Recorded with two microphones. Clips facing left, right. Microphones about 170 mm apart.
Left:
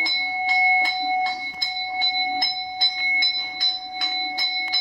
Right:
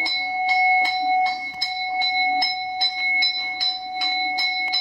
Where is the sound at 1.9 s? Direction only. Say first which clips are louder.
Right 4 dB; 15° right (ahead or behind).